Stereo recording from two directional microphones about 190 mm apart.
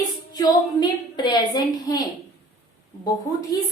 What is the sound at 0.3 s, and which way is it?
A woman's voice, 20° left (ahead or behind).